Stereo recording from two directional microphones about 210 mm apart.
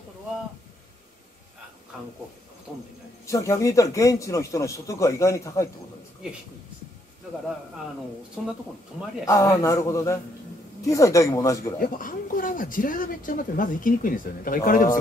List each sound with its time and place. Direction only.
3.3 s a man's voice: 15° left (ahead or behind)
9.2 s a man's voice: 15° left (ahead or behind)
11.8 s speech: 40° left (ahead or behind)